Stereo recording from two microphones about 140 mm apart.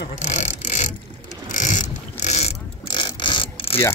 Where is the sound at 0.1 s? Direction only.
55° left (ahead or behind).